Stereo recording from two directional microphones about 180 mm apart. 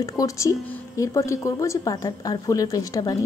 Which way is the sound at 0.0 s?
20° left (ahead or behind).